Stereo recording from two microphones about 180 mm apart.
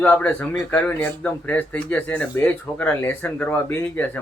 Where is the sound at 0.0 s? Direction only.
10° left (ahead or behind).